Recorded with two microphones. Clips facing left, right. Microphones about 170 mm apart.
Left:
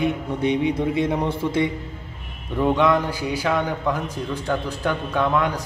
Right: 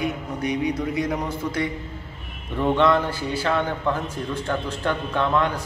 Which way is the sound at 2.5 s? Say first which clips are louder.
Left 1 dB; 10° left (ahead or behind).